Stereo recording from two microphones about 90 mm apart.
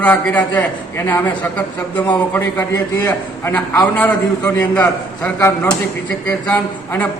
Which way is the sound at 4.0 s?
20° left (ahead or behind).